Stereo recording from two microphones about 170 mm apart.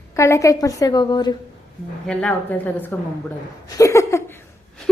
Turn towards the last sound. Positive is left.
turn(degrees=15)  # may be behind; listen again after turning